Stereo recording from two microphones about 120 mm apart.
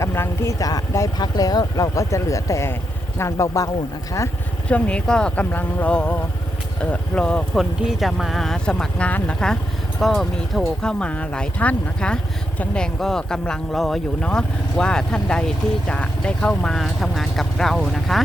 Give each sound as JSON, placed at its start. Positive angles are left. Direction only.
{"t": 0.0, "sound": "speech", "side_deg": 20}
{"t": 4.7, "sound": "speech", "side_deg": 10}
{"t": 10.8, "sound": "speech", "side_deg": 10}